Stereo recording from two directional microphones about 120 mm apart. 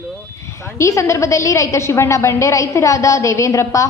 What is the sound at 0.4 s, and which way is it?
A woman's voice, 25° left (ahead or behind).